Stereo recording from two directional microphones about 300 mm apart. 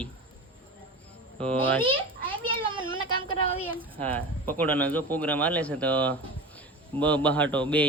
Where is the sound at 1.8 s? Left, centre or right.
Centre.